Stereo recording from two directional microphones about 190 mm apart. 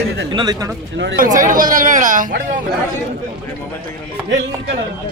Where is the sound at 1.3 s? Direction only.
45° right (ahead or behind).